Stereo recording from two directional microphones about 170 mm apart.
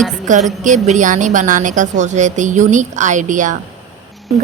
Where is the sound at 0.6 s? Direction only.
45° right (ahead or behind).